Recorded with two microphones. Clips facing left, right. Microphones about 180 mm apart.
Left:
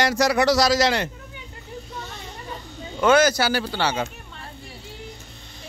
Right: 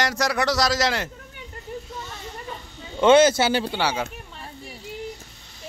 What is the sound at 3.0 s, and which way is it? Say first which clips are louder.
Speech: right 2 dB; 25° right (ahead or behind).